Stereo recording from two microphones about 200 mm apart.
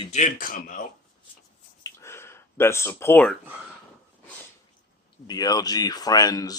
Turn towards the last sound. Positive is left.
turn(degrees=20)  # may be behind; listen again after turning